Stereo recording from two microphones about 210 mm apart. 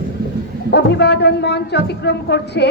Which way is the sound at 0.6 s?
55° left (ahead or behind).